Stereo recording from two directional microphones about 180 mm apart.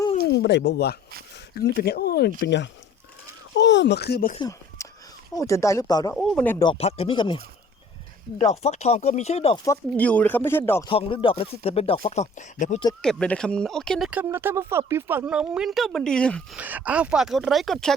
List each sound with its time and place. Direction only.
0.2 s speech: 70° left (ahead or behind)
2.4 s speech: 75° left (ahead or behind)
4.4 s a sound: 20° left (ahead or behind)
5.3 s speech: 20° left (ahead or behind)
6.1 s speech: 5° left (ahead or behind)
6.6 s speech: 30° left (ahead or behind)
8.4 s speech: 40° left (ahead or behind)
9.6 s speech: 10° left (ahead or behind)
10.8 s speech: 30° left (ahead or behind)
13.0 s speech: 5° left (ahead or behind)
14.1 s speech: 10° right (ahead or behind); by 16.6 s 5° left (ahead or behind)
16.6 s speech: 10° right (ahead or behind)